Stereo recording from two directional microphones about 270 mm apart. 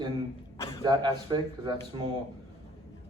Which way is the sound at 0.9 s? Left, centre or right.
Centre.